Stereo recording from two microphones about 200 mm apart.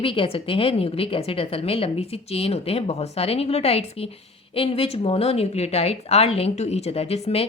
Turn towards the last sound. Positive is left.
turn(degrees=30)  # may be behind; listen again after turning